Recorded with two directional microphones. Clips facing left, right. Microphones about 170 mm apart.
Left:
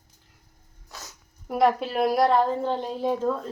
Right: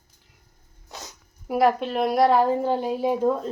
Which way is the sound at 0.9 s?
20° right (ahead or behind).